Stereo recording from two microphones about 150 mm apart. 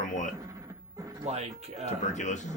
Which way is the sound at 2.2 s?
55° left (ahead or behind).